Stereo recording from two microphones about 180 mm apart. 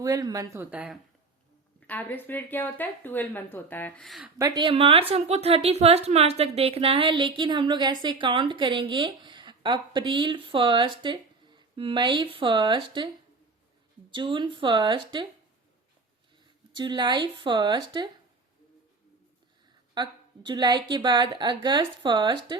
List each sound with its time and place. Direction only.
0.0 s speech: 20° right (ahead or behind)
1.9 s speech: 10° left (ahead or behind)
4.4 s a woman's voice: 20° right (ahead or behind)
14.1 s a woman's voice: 25° right (ahead or behind)
16.7 s a woman's voice: 25° right (ahead or behind)
19.9 s a woman's voice: 25° right (ahead or behind)